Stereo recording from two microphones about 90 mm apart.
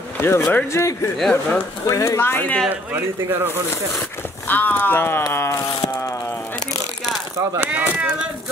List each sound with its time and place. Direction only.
0.2 s speech: 30° left (ahead or behind)
1.2 s speech: 10° left (ahead or behind)
1.9 s speech: 35° left (ahead or behind)
2.7 s speech: 20° right (ahead or behind)
4.5 s speech: 20° left (ahead or behind)
7.5 s speech: 20° right (ahead or behind)